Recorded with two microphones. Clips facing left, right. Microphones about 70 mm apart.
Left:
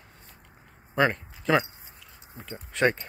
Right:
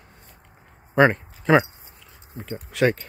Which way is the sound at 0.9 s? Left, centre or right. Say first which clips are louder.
Right 7 dB; right.